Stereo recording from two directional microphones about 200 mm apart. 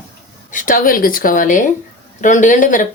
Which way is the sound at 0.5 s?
40° left (ahead or behind).